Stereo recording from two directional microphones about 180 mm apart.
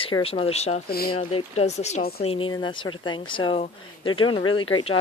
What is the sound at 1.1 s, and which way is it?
Speech, 35° left (ahead or behind).